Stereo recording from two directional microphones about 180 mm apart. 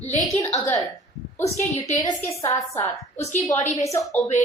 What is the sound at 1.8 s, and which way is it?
A woman's voice, 20° left (ahead or behind).